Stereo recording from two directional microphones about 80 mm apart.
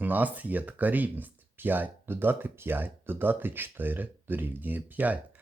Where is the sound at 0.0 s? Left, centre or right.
Right.